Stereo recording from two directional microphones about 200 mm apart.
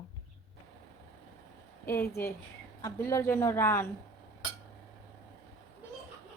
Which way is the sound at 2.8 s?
15° left (ahead or behind).